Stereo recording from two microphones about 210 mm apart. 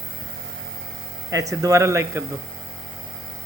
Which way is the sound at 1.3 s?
15° right (ahead or behind).